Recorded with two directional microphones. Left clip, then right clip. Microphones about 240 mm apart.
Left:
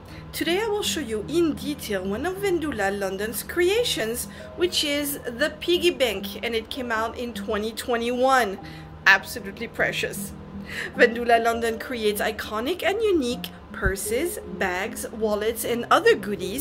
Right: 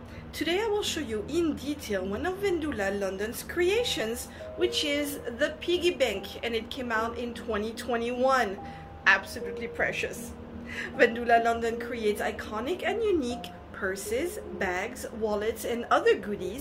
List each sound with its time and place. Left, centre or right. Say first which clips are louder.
0.4 s speech: left 4 dB; left